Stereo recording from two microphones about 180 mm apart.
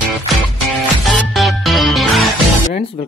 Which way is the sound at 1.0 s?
Centre (ahead or behind).